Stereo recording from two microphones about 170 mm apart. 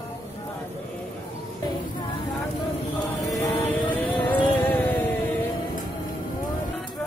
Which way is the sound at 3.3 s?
15° left (ahead or behind).